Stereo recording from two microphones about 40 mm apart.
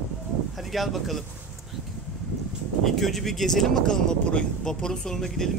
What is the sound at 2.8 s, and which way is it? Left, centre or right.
Speech, centre.